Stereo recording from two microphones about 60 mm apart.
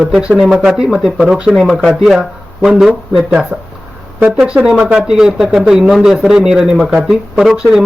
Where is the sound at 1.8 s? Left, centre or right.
Centre.